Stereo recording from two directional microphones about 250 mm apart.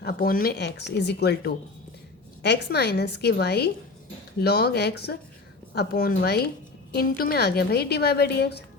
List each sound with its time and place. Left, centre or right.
0.0 s a woman's voice: left